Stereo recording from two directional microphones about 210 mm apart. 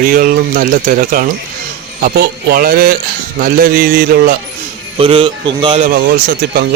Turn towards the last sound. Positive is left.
turn(degrees=-45)  # may be behind; listen again after turning